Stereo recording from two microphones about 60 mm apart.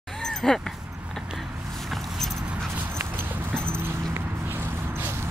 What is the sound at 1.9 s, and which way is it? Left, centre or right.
Vehicle, centre.